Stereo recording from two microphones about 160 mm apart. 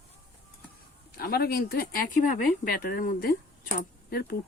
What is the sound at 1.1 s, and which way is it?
Speech, 70° left (ahead or behind).